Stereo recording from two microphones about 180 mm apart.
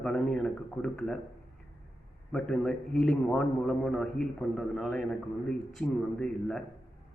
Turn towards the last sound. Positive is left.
turn(degrees=5)  # may be behind; listen again after turning